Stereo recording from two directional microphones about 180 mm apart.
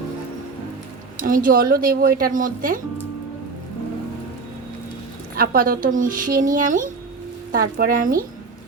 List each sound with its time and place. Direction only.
1.1 s speech: 50° right (ahead or behind)
5.4 s speech: 55° right (ahead or behind)